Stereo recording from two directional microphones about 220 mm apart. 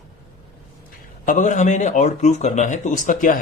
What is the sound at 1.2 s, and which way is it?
Speech, 35° left (ahead or behind).